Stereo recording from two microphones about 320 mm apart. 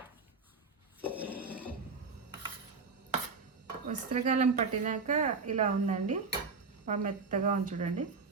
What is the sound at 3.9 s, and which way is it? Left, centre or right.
Speech, right.